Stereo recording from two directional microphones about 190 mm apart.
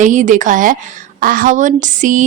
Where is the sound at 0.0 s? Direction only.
40° right (ahead or behind).